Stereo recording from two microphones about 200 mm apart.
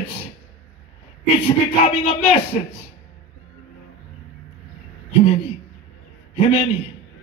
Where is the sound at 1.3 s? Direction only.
35° left (ahead or behind).